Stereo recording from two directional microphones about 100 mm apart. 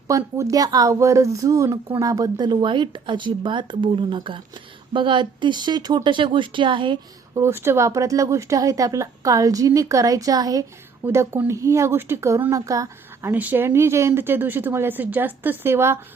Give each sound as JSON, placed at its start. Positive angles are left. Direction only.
{"t": 0.1, "sound": "speech", "side_deg": -35}
{"t": 7.4, "sound": "speech", "side_deg": -25}
{"t": 11.0, "sound": "speech", "side_deg": -25}
{"t": 13.3, "sound": "speech", "side_deg": -20}